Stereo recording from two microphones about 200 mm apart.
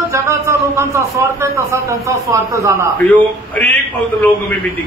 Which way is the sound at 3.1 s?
10° left (ahead or behind).